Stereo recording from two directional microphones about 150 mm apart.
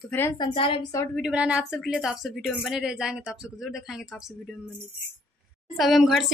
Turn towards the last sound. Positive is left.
turn(degrees=0)  # may be behind; listen again after turning